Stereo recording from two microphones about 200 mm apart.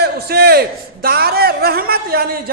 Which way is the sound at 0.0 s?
50° right (ahead or behind).